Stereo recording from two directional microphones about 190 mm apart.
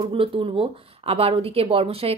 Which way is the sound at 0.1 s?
30° right (ahead or behind).